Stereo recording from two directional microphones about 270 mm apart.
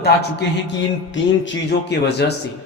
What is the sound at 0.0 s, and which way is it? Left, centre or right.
Speech, left.